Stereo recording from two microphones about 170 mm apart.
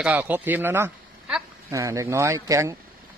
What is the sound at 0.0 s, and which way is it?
A man's voice, 10° right (ahead or behind).